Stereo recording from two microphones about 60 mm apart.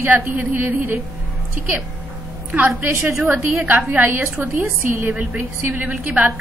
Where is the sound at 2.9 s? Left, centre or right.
Right.